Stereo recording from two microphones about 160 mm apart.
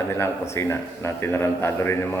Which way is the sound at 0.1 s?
15° left (ahead or behind).